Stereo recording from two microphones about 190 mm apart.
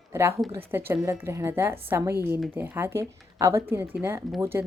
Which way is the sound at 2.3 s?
Centre (ahead or behind).